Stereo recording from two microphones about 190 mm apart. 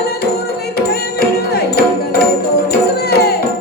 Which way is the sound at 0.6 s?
55° left (ahead or behind).